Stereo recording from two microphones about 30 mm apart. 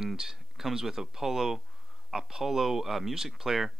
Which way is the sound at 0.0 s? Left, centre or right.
Centre.